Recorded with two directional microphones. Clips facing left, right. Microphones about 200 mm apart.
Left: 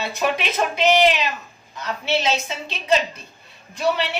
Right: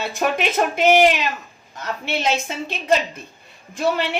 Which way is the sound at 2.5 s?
50° right (ahead or behind).